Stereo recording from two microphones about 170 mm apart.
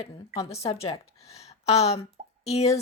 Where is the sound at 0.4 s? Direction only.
35° left (ahead or behind).